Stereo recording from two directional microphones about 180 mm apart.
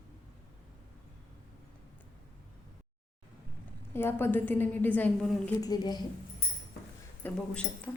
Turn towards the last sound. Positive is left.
turn(degrees=5)  # may be behind; listen again after turning